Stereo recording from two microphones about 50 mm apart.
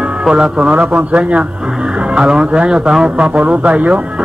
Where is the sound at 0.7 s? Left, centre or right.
Centre.